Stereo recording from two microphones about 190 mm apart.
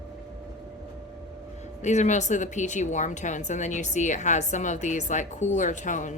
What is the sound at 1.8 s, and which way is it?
A woman's voice, 40° left (ahead or behind).